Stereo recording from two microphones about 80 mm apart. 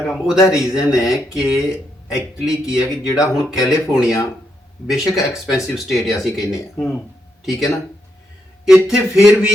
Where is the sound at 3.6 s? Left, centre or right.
Left.